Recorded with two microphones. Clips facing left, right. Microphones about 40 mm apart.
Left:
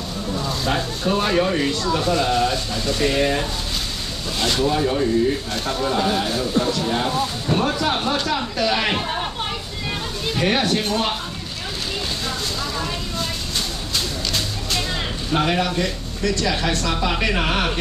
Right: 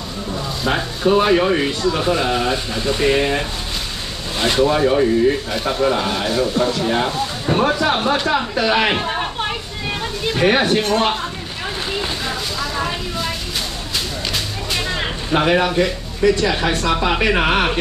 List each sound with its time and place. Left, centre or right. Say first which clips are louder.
0.7 s speech: right 6 dB; centre
12.3 s vehicle: right 2 dB; right
13.9 s a sound: right 1 dB; centre